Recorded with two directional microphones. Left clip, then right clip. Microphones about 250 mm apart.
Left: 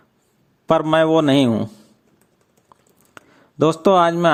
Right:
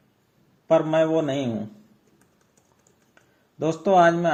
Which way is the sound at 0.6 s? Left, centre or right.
Left.